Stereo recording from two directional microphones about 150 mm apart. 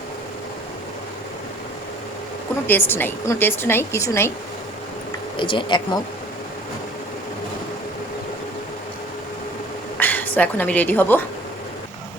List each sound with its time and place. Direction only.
2.6 s speech: 15° left (ahead or behind)
5.4 s speech: 35° left (ahead or behind)
10.0 s a woman's voice: 10° left (ahead or behind)